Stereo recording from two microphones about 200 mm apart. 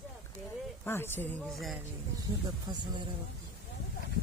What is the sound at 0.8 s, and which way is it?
Speech, 10° left (ahead or behind).